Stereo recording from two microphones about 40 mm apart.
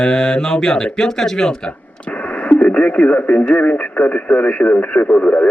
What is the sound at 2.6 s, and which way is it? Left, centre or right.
Speech, left.